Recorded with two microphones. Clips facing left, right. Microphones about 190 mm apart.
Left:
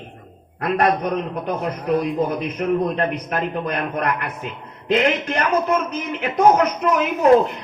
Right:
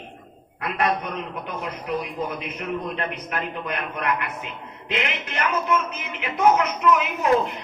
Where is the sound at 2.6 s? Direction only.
40° left (ahead or behind).